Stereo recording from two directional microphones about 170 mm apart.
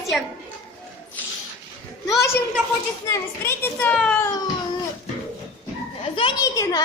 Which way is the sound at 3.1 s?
15° left (ahead or behind).